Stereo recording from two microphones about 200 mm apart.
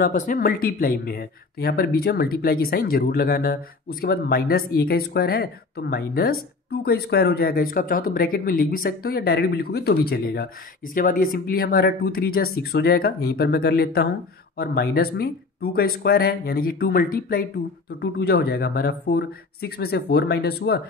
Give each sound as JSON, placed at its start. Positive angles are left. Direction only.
{"t": 0.0, "sound": "speech", "side_deg": 40}